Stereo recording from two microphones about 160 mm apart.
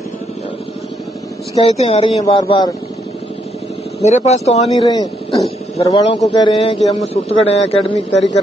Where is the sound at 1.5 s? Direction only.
40° left (ahead or behind).